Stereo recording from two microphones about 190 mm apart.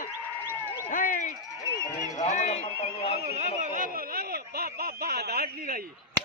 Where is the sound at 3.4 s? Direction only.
40° right (ahead or behind).